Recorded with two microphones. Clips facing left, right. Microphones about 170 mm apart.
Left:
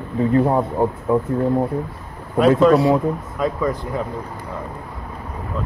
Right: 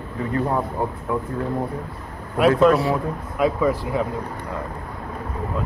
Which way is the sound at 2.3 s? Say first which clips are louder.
Left 3 dB; 5° right (ahead or behind).